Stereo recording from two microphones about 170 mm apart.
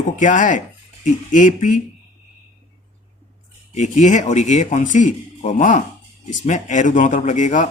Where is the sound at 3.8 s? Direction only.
45° left (ahead or behind).